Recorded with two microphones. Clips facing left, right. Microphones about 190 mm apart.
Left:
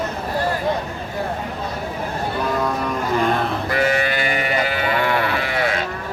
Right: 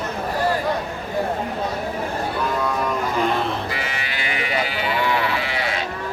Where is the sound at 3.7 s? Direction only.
50° left (ahead or behind).